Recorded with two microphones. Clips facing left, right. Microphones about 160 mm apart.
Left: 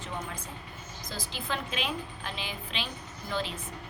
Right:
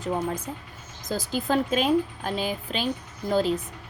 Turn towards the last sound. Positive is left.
turn(degrees=-40)  # may be behind; listen again after turning